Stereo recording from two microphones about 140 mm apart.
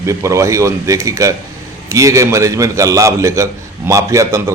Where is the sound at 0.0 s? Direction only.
20° right (ahead or behind).